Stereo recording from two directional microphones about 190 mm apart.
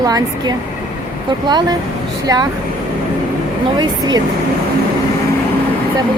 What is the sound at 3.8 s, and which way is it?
Speech, 20° right (ahead or behind).